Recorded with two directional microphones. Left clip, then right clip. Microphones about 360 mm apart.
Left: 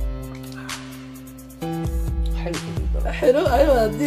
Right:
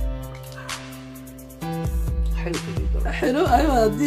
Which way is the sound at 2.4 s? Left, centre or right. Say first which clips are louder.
Even; centre.